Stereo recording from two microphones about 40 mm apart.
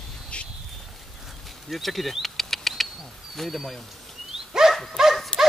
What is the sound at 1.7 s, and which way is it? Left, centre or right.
Insect, centre.